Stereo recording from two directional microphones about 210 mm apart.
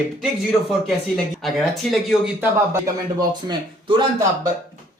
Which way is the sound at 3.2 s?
20° right (ahead or behind).